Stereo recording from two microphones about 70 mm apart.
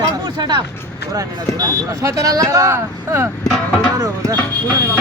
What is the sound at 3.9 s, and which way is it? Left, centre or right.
Speech, right.